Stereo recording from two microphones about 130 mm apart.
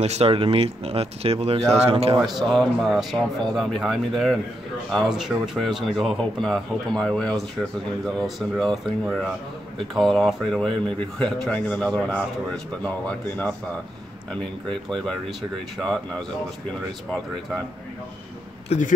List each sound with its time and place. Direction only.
0.0 s speech: 55° right (ahead or behind)
2.2 s a man's voice: centre (ahead or behind)
18.7 s speech: 50° left (ahead or behind)